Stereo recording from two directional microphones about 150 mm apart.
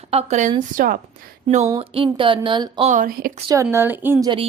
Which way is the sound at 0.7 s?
65° right (ahead or behind).